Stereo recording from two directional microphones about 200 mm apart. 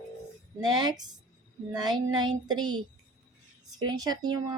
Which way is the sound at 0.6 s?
20° right (ahead or behind).